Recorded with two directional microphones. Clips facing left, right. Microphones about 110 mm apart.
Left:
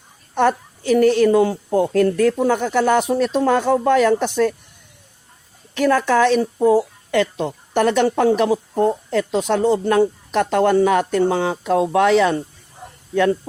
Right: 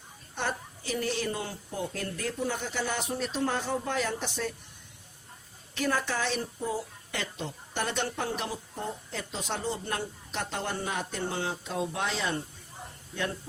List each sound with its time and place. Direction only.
0.3 s a woman's voice: 65° left (ahead or behind)
5.7 s a woman's voice: 75° left (ahead or behind); by 13.5 s 90° left